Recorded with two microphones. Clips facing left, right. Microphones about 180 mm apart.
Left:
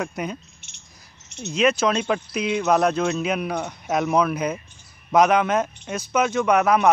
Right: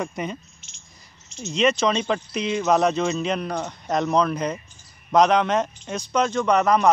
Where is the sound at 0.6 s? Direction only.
65° left (ahead or behind).